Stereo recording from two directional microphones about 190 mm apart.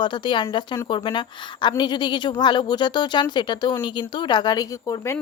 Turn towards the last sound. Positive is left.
turn(degrees=15)  # may be behind; listen again after turning